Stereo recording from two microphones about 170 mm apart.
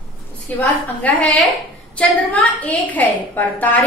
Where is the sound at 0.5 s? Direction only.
10° left (ahead or behind).